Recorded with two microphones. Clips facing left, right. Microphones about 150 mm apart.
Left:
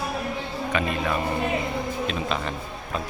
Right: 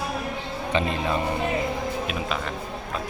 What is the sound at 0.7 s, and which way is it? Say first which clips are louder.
Speech: right 1 dB; 25° right (ahead or behind).